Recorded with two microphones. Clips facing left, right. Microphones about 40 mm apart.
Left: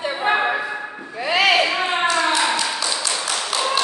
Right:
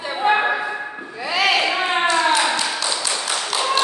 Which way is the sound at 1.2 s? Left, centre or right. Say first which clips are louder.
Left 2 dB; left.